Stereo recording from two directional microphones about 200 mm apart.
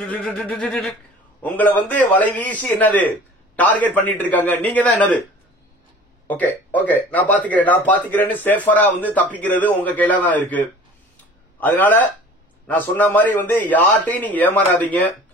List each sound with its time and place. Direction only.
0.1 s a sound: 5° left (ahead or behind)
1.4 s speech: 10° left (ahead or behind)
6.2 s speech: 10° left (ahead or behind)
11.6 s speech: 10° left (ahead or behind)